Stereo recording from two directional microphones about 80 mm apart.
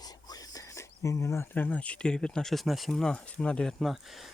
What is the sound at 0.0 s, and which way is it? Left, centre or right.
Whispering, left.